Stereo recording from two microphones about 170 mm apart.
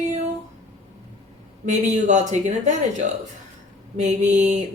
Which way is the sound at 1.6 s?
45° right (ahead or behind).